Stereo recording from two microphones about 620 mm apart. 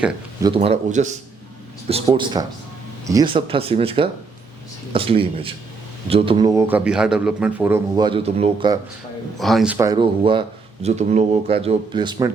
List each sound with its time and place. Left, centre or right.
0.0 s a man's voice: centre